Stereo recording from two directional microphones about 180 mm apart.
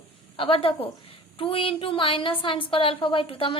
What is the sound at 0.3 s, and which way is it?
A woman's voice, 30° left (ahead or behind).